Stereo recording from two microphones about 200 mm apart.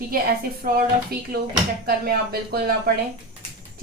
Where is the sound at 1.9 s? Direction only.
50° right (ahead or behind).